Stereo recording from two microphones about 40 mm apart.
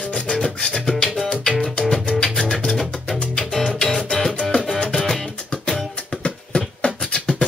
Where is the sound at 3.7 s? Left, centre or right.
Centre.